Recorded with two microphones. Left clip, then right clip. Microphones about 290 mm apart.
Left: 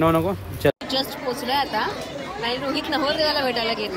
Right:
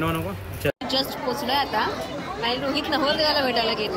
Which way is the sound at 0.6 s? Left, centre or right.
Left.